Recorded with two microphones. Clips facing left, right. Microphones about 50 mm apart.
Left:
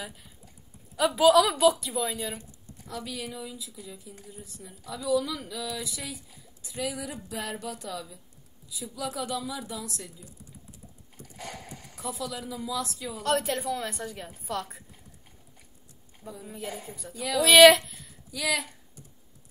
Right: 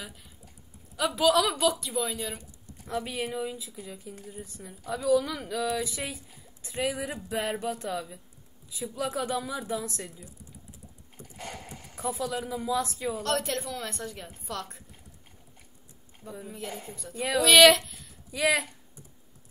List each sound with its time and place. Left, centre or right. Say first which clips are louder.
0.0 s a woman's voice: left 3 dB; centre
2.3 s speech: left 1 dB; right
11.3 s speech: even; centre; by 13.2 s right
13.2 s a woman's voice: left 5 dB; centre
16.4 s a woman's voice: left 2 dB; centre
17.1 s speech: right 2 dB; right
17.4 s a woman's voice: left 2 dB; centre
18.3 s speech: right 4 dB; right